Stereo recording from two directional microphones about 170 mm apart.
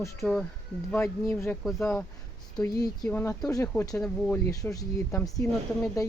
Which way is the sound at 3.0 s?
10° left (ahead or behind).